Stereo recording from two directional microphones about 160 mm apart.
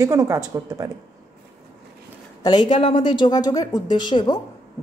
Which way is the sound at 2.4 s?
30° left (ahead or behind).